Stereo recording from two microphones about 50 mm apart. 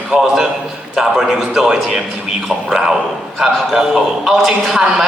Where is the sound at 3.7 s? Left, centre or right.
Centre.